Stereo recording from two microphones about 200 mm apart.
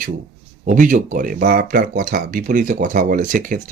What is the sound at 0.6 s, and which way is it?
Speech, 40° right (ahead or behind).